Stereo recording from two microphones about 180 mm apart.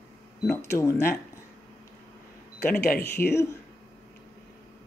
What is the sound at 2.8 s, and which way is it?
Speech, 60° left (ahead or behind).